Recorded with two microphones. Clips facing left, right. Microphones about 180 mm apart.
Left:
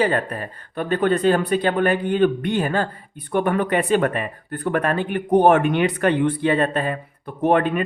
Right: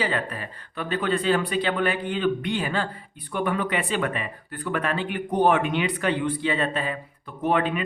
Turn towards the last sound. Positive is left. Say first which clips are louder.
# left 5 dB
turn(degrees=50)  # may be behind; listen again after turning